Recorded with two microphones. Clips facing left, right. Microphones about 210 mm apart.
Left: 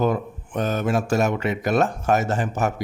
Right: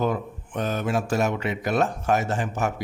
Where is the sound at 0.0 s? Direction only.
45° left (ahead or behind).